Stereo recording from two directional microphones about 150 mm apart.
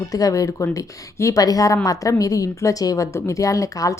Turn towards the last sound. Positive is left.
turn(degrees=20)  # may be behind; listen again after turning